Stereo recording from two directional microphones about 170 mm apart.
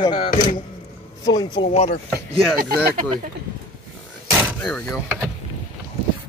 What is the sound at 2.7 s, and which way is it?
Speech, 65° right (ahead or behind).